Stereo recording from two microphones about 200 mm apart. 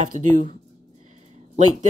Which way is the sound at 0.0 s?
40° right (ahead or behind).